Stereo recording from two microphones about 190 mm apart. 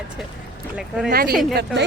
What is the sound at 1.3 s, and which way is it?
Speech, centre (ahead or behind).